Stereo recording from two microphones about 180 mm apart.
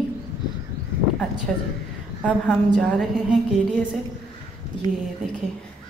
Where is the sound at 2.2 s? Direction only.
Centre (ahead or behind).